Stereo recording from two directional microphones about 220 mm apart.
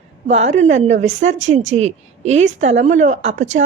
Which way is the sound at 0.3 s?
30° right (ahead or behind).